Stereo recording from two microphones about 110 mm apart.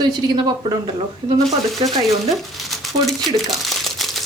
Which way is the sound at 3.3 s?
Centre (ahead or behind).